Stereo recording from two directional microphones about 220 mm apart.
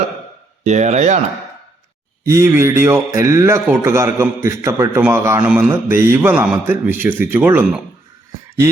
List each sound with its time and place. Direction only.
0.6 s speech: 30° right (ahead or behind)
2.2 s a man's voice: 10° right (ahead or behind)